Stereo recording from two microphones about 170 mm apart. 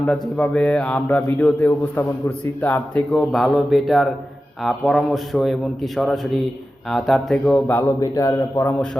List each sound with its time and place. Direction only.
0.0 s a man's voice: 5° left (ahead or behind)
8.0 s a man's voice: 20° left (ahead or behind)